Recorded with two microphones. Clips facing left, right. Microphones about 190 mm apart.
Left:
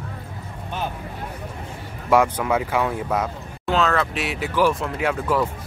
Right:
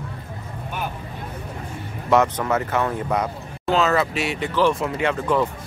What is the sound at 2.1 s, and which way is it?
Speech, 10° left (ahead or behind).